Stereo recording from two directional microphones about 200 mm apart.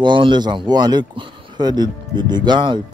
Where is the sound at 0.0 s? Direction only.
25° right (ahead or behind).